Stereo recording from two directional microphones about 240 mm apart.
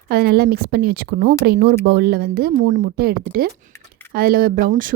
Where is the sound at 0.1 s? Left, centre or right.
Right.